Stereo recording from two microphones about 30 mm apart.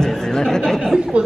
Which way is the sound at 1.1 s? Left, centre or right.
Right.